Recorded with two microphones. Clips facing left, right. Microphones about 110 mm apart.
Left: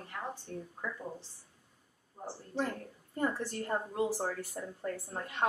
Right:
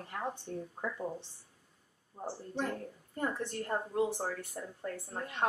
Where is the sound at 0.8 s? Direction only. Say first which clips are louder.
Right 2 dB; 20° right (ahead or behind).